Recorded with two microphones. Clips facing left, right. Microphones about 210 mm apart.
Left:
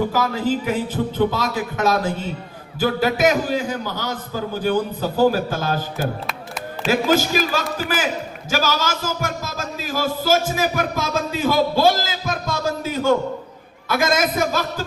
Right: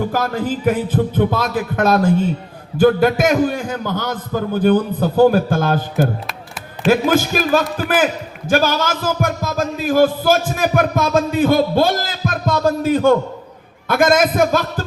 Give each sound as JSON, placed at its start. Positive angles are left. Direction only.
{"t": 0.1, "sound": "a man's voice", "side_deg": -55}